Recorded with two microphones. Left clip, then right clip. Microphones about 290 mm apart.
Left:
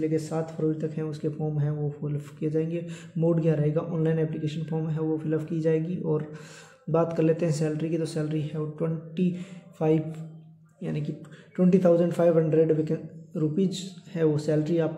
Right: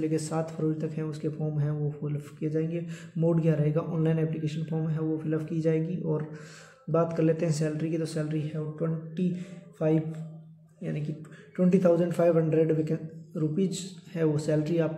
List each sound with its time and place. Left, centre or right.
0.0 s a man's voice: centre